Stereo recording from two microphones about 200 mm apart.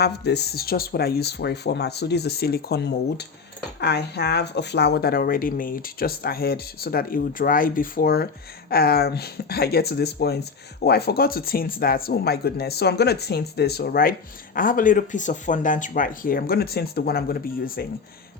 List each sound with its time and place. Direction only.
0.0 s speech: 55° left (ahead or behind)